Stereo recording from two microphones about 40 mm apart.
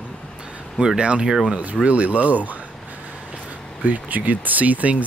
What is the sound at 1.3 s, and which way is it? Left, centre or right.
Speech, centre.